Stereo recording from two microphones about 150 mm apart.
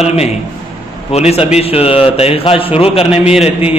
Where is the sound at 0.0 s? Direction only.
45° left (ahead or behind).